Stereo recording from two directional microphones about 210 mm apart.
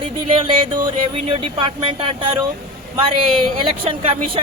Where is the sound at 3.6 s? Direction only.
25° right (ahead or behind).